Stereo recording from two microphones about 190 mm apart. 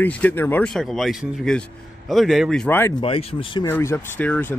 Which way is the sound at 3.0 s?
30° left (ahead or behind).